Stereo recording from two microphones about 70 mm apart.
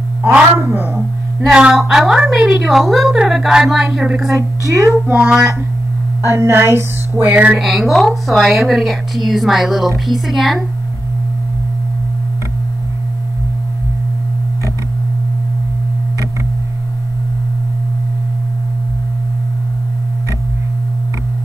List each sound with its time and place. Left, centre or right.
0.6 s a sound: right
1.5 s a woman's voice: centre
4.4 s speech: right
5.0 s child singing: centre
6.2 s a sound: right
7.5 s a woman's voice: centre